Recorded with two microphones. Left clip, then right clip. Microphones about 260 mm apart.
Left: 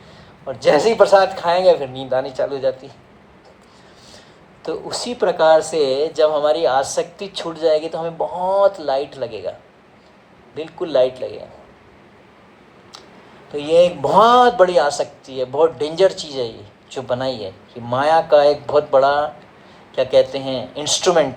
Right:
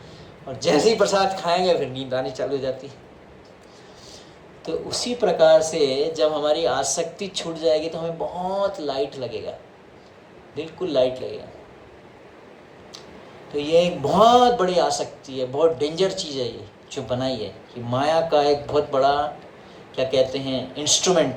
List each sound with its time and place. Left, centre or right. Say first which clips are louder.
0.4 s speech: left 4 dB; left
4.6 s speech: left 2 dB; left
13.5 s speech: left 5 dB; left